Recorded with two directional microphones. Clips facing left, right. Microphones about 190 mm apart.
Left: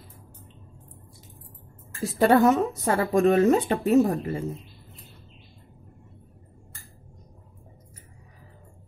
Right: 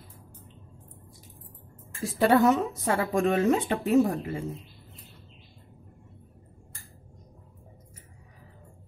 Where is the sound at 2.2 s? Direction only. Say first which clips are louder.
Left 2 dB; 50° left (ahead or behind).